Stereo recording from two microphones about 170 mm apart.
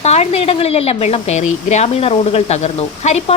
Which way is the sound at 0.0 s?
40° left (ahead or behind).